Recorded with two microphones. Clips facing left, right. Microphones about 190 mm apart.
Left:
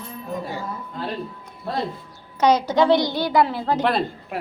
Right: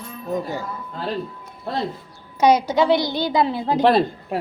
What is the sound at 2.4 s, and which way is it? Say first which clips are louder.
A woman's voice: right 1 dB; 10° right (ahead or behind).